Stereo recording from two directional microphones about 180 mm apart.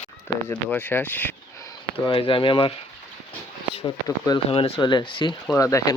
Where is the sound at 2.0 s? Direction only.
30° left (ahead or behind).